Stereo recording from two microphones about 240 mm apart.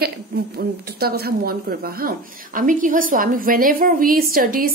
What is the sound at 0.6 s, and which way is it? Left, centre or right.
Speech, right.